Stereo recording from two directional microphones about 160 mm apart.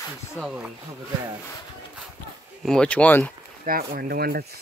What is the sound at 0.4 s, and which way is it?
Mantra, 5° right (ahead or behind).